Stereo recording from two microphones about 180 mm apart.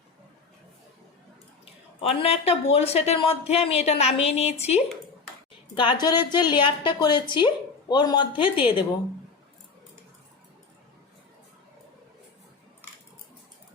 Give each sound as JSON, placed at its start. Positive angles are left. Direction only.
{"t": 2.0, "sound": "speech", "side_deg": 35}
{"t": 5.7, "sound": "a woman's voice", "side_deg": 25}